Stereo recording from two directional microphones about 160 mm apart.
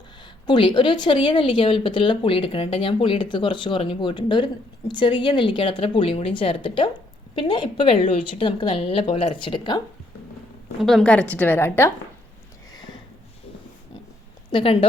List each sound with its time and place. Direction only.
0.4 s speech: 30° left (ahead or behind)
10.8 s a woman's voice: centre (ahead or behind)
12.7 s a sound: 25° left (ahead or behind)
14.5 s speech: 35° left (ahead or behind)